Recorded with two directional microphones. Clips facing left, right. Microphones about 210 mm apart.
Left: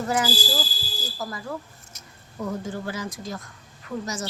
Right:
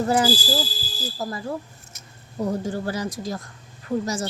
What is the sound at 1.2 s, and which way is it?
Speech, 30° right (ahead or behind).